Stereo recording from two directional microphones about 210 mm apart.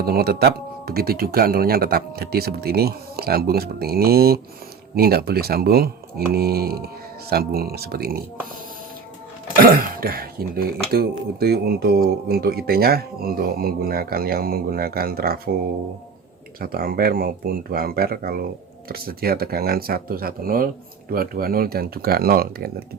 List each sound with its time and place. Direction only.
0.0 s speech: 45° right (ahead or behind)
9.6 s speech: 45° right (ahead or behind)
16.6 s speech: 45° right (ahead or behind)